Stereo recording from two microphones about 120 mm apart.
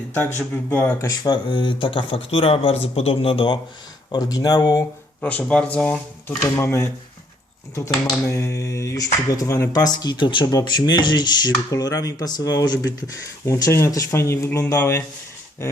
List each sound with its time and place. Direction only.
0.2 s speech: 15° left (ahead or behind); by 3.6 s 50° left (ahead or behind)
4.1 s speech: 30° left (ahead or behind)
5.2 s speech: 10° left (ahead or behind)
6.4 s speech: 25° left (ahead or behind)
8.3 s speech: 25° left (ahead or behind)